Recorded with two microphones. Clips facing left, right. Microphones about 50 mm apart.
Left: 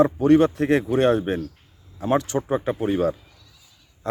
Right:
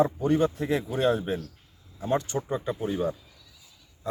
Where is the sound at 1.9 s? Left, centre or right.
Left.